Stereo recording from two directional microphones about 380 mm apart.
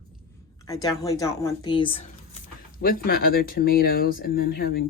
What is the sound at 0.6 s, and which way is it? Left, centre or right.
Speech, centre.